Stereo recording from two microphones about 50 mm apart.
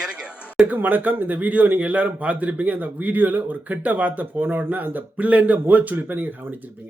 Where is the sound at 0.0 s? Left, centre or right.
Centre.